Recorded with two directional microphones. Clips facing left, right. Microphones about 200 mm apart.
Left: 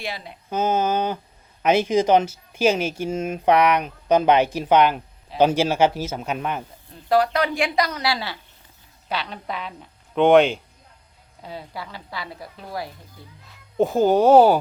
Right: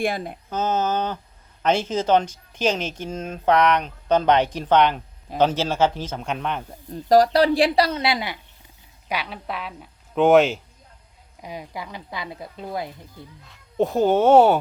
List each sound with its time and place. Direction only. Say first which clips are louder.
0.0 s speech: right 8 dB; 50° right (ahead or behind)
0.5 s speech: left 2 dB; 10° left (ahead or behind)
7.1 s a woman's voice: right 4 dB; 35° right (ahead or behind); by 10.6 s centre (ahead or behind)
11.4 s speech: right 1 dB; 15° right (ahead or behind)
13.7 s speech: left 1 dB; centre (ahead or behind)